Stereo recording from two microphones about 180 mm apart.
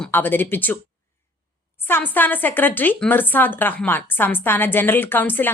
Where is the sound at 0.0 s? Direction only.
10° left (ahead or behind).